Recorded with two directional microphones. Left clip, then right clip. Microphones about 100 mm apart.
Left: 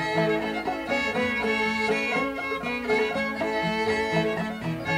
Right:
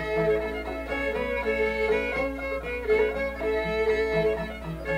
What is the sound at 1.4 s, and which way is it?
Music, 30° left (ahead or behind).